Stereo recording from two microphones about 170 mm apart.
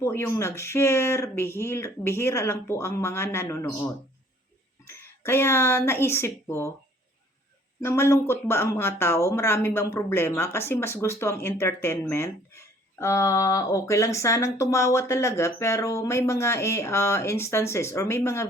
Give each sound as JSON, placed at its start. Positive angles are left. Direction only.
{"t": 0.0, "sound": "speech", "side_deg": 15}
{"t": 7.8, "sound": "speech", "side_deg": 15}